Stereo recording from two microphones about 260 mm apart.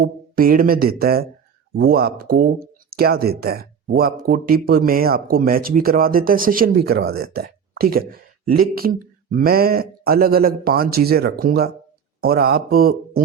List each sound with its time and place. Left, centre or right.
0.0 s speech: right